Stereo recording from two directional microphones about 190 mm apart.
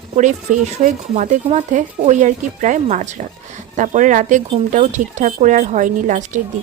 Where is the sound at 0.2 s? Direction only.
40° right (ahead or behind).